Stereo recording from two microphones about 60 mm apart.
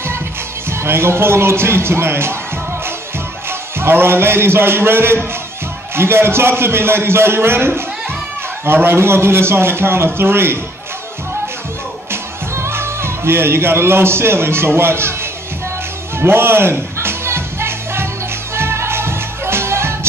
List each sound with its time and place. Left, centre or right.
0.7 s speech: right
3.4 s a man's voice: right
12.1 s speech: right
16.2 s music: right